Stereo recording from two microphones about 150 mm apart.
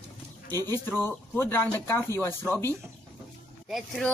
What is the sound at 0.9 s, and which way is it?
Speech, 15° left (ahead or behind).